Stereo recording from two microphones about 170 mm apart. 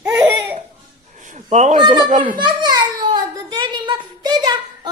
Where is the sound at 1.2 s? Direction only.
45° right (ahead or behind).